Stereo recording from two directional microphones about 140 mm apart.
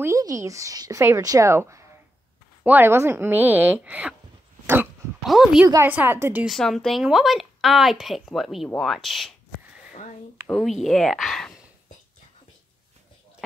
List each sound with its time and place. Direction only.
0.0 s a woman's voice: 25° right (ahead or behind)
5.2 s a woman's voice: centre (ahead or behind)
5.9 s a woman's voice: 15° right (ahead or behind)
6.4 s a woman's voice: centre (ahead or behind)
10.5 s a woman's voice: centre (ahead or behind)